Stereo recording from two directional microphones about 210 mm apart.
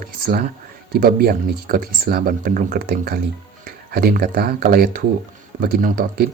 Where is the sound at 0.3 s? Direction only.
45° right (ahead or behind).